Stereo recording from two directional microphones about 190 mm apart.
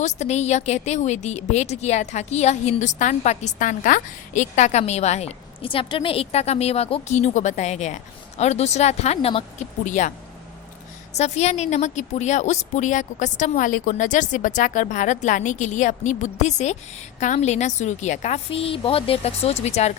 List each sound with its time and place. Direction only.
0.0 s a woman's voice: 35° left (ahead or behind)
11.1 s a woman's voice: 35° left (ahead or behind)